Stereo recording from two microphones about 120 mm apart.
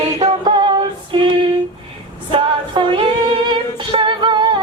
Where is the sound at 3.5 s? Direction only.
45° right (ahead or behind).